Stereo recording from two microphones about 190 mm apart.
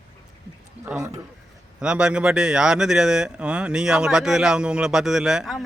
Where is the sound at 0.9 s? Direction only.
5° right (ahead or behind).